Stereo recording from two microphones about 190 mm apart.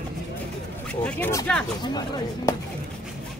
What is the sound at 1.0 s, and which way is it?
Speech, 10° left (ahead or behind).